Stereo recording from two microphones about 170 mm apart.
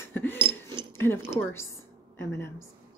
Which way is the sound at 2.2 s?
15° left (ahead or behind).